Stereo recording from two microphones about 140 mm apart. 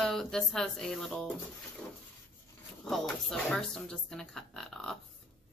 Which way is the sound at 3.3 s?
5° left (ahead or behind).